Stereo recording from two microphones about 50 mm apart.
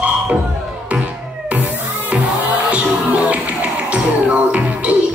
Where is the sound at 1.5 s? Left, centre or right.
Right.